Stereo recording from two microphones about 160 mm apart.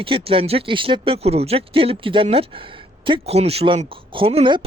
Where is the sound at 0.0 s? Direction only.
35° right (ahead or behind).